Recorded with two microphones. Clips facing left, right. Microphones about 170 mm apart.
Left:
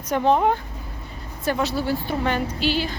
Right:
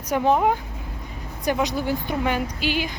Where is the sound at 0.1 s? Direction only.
5° right (ahead or behind).